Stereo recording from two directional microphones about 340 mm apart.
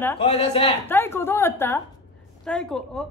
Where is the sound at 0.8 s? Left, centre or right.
Centre.